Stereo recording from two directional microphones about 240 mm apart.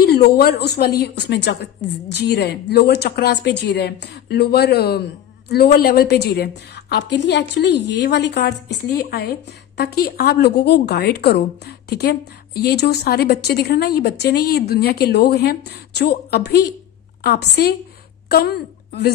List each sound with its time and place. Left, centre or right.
0.0 s a woman's voice: left